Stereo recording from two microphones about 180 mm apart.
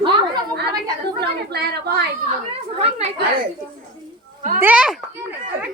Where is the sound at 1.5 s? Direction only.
65° right (ahead or behind).